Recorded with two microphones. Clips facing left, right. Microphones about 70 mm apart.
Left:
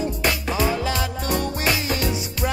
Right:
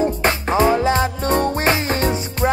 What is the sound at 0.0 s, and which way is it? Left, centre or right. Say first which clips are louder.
Music: right 5 dB; right.